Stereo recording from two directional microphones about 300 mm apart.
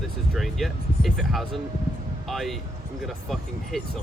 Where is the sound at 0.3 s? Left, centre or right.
Centre.